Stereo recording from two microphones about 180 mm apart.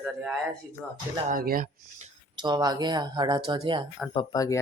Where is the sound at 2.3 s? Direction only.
25° right (ahead or behind).